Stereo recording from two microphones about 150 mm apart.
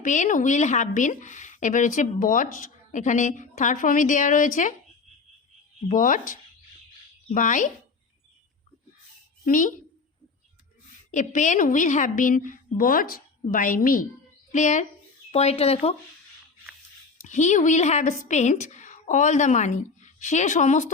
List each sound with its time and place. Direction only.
0.0 s a woman's voice: 55° left (ahead or behind)
5.9 s a woman's voice: 60° left (ahead or behind)
9.4 s a woman's voice: 60° left (ahead or behind)
11.1 s a woman's voice: 55° left (ahead or behind)
14.5 s a woman's voice: 55° left (ahead or behind)
15.3 s a woman's voice: 45° left (ahead or behind)
17.2 s a woman's voice: 55° left (ahead or behind)